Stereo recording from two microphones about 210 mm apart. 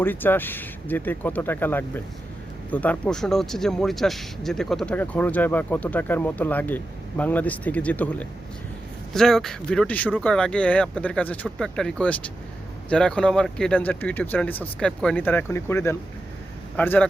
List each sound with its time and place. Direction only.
0.0 s speech: 10° left (ahead or behind)